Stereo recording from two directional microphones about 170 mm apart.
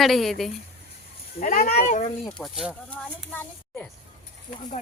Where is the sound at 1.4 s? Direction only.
50° left (ahead or behind).